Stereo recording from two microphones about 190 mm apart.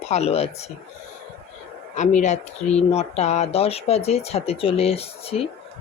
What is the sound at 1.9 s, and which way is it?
Speech, 40° left (ahead or behind).